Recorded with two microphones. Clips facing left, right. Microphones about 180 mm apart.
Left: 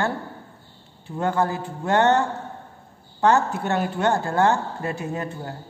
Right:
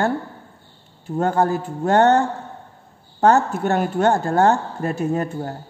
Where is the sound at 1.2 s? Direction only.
40° right (ahead or behind).